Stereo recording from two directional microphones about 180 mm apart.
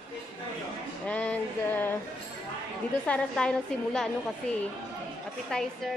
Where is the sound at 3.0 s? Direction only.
5° left (ahead or behind).